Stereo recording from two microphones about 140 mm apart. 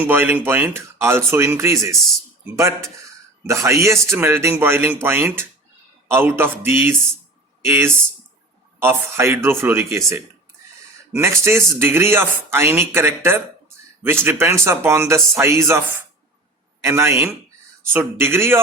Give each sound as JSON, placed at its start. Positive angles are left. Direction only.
{"t": 0.0, "sound": "speech", "side_deg": -15}
{"t": 3.4, "sound": "a man's voice", "side_deg": -20}
{"t": 11.1, "sound": "a man's voice", "side_deg": -20}